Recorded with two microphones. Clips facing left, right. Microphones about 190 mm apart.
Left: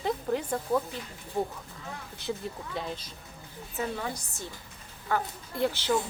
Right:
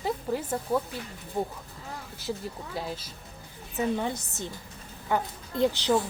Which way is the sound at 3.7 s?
20° right (ahead or behind).